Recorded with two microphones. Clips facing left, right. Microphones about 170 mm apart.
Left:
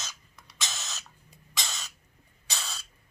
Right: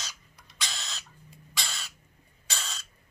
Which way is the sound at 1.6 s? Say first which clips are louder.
Left 1 dB; 20° left (ahead or behind).